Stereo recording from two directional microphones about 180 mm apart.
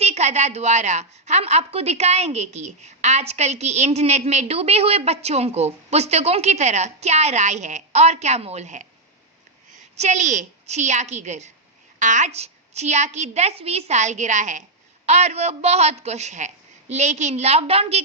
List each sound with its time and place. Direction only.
0.0 s a woman's voice: 35° right (ahead or behind)